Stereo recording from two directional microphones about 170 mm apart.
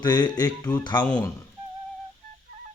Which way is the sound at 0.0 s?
25° left (ahead or behind).